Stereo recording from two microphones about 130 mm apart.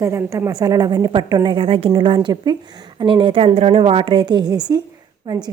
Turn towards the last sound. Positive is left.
turn(degrees=-30)  # may be behind; listen again after turning